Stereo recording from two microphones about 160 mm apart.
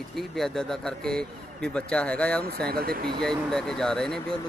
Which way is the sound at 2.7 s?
70° right (ahead or behind).